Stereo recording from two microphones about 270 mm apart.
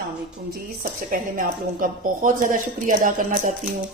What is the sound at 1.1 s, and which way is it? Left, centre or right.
A woman's voice, right.